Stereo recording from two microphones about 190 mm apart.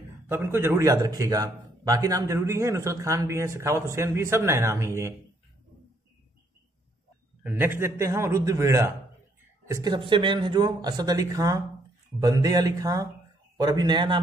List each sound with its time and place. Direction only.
0.3 s a man's voice: 10° right (ahead or behind)
7.4 s a man's voice: 10° right (ahead or behind)